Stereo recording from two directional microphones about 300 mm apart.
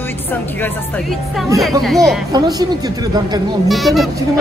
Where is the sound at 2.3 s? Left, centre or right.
Centre.